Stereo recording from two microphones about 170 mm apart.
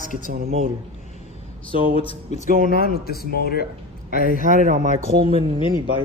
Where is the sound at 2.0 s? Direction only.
35° left (ahead or behind).